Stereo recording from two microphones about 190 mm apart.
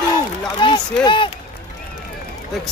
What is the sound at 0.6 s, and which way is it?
Speech, 25° left (ahead or behind).